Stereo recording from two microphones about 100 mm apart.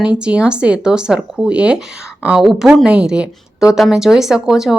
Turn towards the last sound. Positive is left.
turn(degrees=-5)  # may be behind; listen again after turning